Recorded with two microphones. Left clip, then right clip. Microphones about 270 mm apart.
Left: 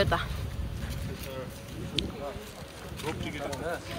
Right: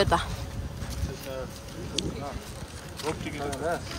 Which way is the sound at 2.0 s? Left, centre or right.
Centre.